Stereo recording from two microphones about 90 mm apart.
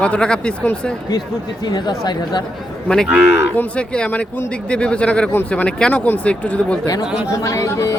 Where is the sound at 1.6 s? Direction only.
50° left (ahead or behind).